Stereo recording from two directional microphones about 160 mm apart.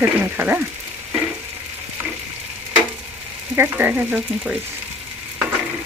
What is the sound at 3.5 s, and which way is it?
Speech, 10° right (ahead or behind).